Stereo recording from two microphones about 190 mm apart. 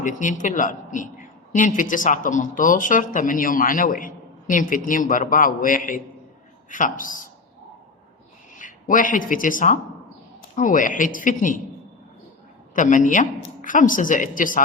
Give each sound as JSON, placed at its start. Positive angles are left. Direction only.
{"t": 0.0, "sound": "speech", "side_deg": 40}
{"t": 8.5, "sound": "speech", "side_deg": 45}
{"t": 12.7, "sound": "speech", "side_deg": 40}